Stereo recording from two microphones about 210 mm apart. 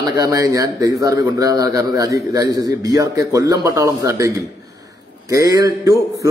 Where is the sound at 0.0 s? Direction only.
20° right (ahead or behind).